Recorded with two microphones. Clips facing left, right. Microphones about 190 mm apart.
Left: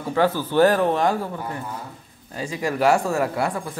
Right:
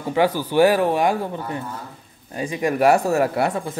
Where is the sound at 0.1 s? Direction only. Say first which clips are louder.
Right 1 dB; 15° right (ahead or behind).